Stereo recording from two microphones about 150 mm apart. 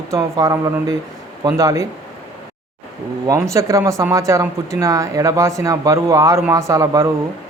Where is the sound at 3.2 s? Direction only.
20° right (ahead or behind).